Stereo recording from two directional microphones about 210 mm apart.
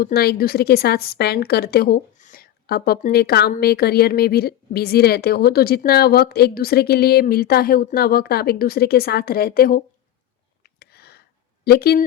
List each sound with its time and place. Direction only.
0.0 s a woman's voice: 50° left (ahead or behind)
10.6 s a sound: 50° left (ahead or behind)
11.6 s speech: 50° left (ahead or behind)